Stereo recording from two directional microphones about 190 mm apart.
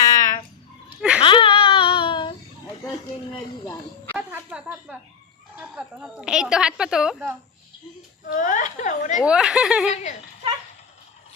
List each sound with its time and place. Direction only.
0.0 s a sound: 15° left (ahead or behind)
1.2 s babbling: 25° left (ahead or behind)
4.3 s a woman's voice: 10° right (ahead or behind)
8.3 s a woman's voice: 40° left (ahead or behind)
9.2 s a woman's voice: 5° right (ahead or behind)
9.9 s a woman's voice: 40° left (ahead or behind)